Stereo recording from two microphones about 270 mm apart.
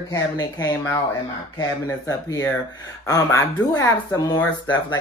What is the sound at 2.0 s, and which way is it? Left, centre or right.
Speech, centre.